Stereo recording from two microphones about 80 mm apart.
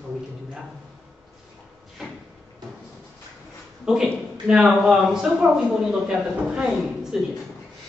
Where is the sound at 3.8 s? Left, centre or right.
Centre.